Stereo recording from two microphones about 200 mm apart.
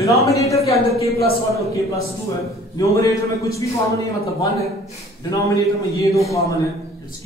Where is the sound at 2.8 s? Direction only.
15° left (ahead or behind).